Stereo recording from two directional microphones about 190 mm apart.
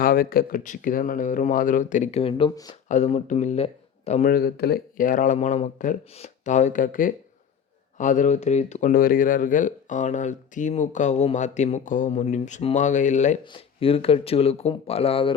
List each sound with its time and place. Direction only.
0.0 s speech: 50° left (ahead or behind); by 2.7 s 25° left (ahead or behind)
2.9 s speech: 40° left (ahead or behind)
4.3 s speech: 55° left (ahead or behind); by 15.3 s 30° left (ahead or behind)